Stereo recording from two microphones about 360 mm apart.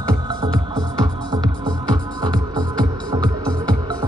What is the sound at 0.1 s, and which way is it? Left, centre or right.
Music, centre.